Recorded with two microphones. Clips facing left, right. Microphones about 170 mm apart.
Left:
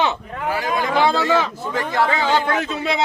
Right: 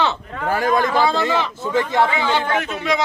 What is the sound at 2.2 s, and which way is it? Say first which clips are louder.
Speech: left 1 dB; 35° left (ahead or behind).